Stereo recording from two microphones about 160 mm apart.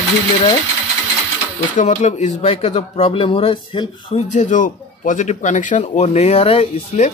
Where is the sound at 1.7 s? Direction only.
45° left (ahead or behind).